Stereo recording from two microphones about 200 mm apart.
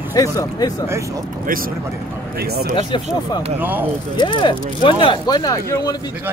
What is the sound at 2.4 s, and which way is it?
Speech, 50° right (ahead or behind).